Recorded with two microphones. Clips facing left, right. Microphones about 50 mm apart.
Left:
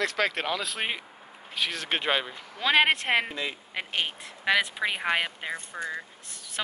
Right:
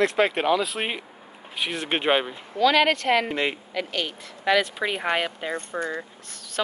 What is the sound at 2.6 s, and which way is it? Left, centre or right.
Speech, left.